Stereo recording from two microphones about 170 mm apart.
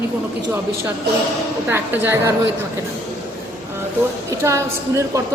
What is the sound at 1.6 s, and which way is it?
Speech, 10° right (ahead or behind).